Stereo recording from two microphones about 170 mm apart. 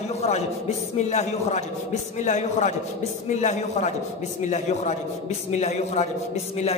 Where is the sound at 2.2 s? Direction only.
45° left (ahead or behind).